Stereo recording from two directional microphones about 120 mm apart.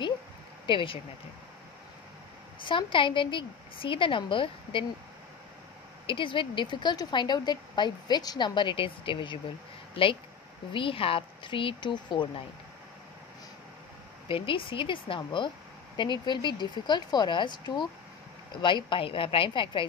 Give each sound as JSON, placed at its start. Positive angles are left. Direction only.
{"t": 0.7, "sound": "a woman's voice", "side_deg": 45}
{"t": 2.6, "sound": "a woman's voice", "side_deg": 45}
{"t": 6.0, "sound": "a woman's voice", "side_deg": 45}
{"t": 10.7, "sound": "a woman's voice", "side_deg": 45}
{"t": 14.2, "sound": "a woman's voice", "side_deg": 45}